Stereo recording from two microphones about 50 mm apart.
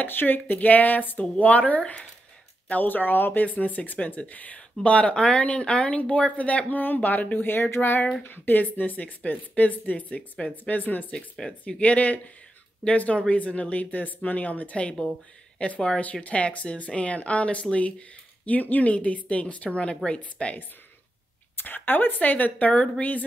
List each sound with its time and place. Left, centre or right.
0.0 s speech: left
21.5 s speech: left